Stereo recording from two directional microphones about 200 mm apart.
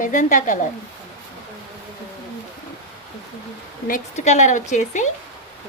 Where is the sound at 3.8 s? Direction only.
40° left (ahead or behind).